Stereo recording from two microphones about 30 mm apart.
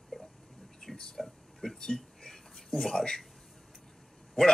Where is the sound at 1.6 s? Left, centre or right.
Left.